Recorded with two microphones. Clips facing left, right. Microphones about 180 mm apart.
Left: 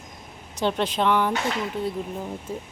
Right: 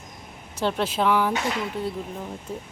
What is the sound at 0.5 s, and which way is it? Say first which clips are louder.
Speech: left 1 dB; centre (ahead or behind).